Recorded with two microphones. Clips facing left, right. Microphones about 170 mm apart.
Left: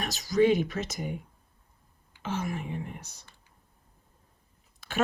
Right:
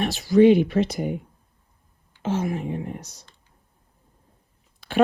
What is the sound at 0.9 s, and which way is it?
Speech, 50° right (ahead or behind).